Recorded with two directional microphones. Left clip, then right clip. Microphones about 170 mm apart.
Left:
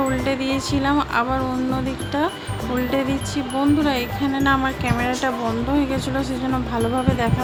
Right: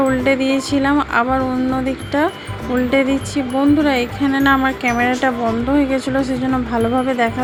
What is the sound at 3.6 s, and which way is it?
Speech, 25° right (ahead or behind).